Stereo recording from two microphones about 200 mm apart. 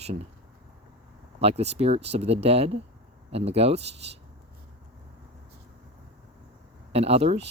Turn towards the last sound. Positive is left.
turn(degrees=-30)  # may be behind; listen again after turning